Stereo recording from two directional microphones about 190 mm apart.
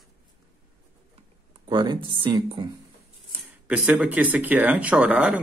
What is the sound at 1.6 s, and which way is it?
Speech, 25° right (ahead or behind).